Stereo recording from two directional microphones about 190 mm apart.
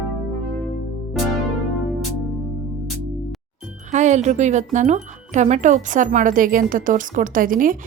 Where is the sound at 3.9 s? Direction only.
40° right (ahead or behind).